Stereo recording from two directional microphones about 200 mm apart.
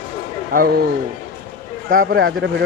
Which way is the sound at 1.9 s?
45° right (ahead or behind).